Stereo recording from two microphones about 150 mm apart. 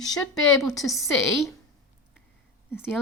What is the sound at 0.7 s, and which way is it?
Speech, centre (ahead or behind).